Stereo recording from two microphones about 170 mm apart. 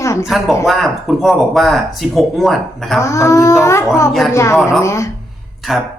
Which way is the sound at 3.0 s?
15° left (ahead or behind).